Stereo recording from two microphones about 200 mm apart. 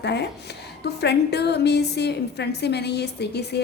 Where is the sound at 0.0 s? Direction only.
55° left (ahead or behind).